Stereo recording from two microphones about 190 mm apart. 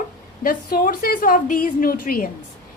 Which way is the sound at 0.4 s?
50° left (ahead or behind).